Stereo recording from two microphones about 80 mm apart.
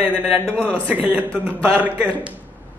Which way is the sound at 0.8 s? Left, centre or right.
Centre.